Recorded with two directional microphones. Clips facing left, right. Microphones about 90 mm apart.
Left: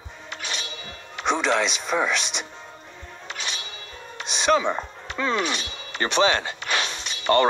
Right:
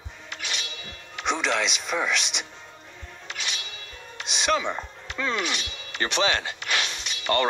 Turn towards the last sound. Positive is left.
turn(degrees=35)  # may be behind; listen again after turning